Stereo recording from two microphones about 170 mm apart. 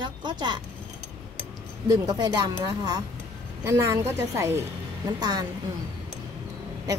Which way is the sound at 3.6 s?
15° right (ahead or behind).